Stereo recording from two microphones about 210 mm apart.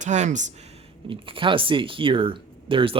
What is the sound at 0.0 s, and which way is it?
Speech, 35° right (ahead or behind).